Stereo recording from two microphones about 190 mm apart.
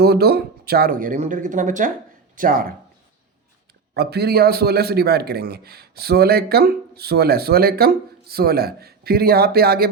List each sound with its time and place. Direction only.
0.0 s speech: 55° right (ahead or behind)
3.9 s a man's voice: 60° right (ahead or behind)